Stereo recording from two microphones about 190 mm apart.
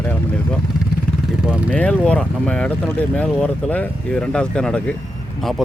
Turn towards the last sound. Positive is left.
turn(degrees=0)  # may be behind; listen again after turning